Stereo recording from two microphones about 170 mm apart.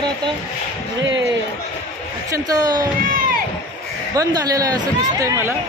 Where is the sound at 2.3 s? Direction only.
20° right (ahead or behind).